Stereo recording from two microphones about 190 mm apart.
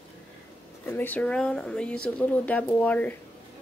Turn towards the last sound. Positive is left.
turn(degrees=10)  # may be behind; listen again after turning